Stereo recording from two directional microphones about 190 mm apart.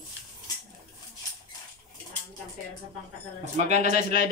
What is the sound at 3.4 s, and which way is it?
Speech, 35° right (ahead or behind).